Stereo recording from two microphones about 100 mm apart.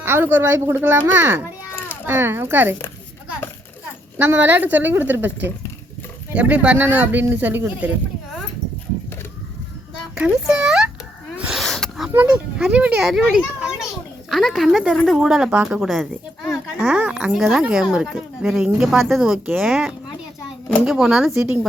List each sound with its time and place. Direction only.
0.0 s speech: 20° right (ahead or behind)
4.2 s speech: 20° right (ahead or behind)
10.2 s speech: 10° right (ahead or behind)
11.3 s sneeze: 5° right (ahead or behind)
12.7 s speech: 15° right (ahead or behind)
13.0 s a child's voice: 5° right (ahead or behind)
15.8 s speech: centre (ahead or behind)
16.7 s speech: 10° right (ahead or behind)
21.3 s speech: 20° right (ahead or behind)